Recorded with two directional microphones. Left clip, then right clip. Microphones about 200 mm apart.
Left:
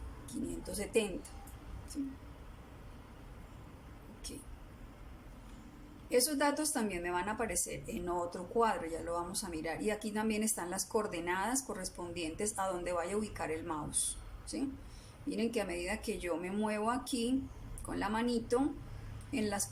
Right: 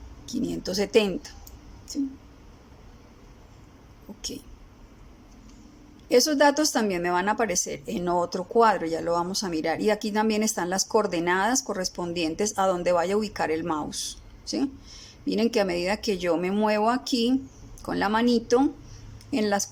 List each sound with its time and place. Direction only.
0.3 s speech: 45° right (ahead or behind)
6.1 s speech: 40° right (ahead or behind)
15.3 s speech: 40° right (ahead or behind)